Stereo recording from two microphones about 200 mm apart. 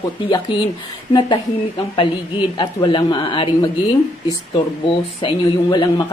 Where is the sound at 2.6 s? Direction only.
25° left (ahead or behind).